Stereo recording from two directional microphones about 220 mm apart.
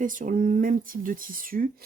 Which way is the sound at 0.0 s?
35° right (ahead or behind).